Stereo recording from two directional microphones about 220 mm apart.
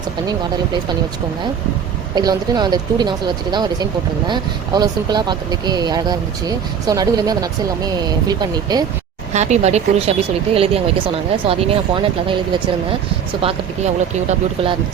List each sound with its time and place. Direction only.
0.3 s speech: 20° right (ahead or behind)
2.1 s speech: 20° right (ahead or behind)
9.3 s speech: 30° right (ahead or behind)
13.4 s speech: 30° right (ahead or behind)